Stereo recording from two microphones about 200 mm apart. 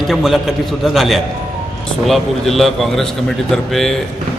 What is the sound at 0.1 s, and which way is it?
A man's voice, centre (ahead or behind).